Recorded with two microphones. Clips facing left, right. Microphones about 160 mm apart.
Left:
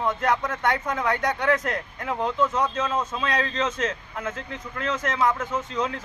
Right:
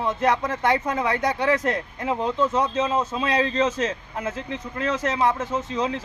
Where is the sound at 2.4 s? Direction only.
30° right (ahead or behind).